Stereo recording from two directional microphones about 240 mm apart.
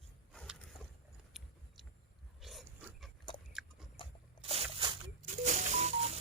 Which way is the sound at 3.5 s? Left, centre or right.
Centre.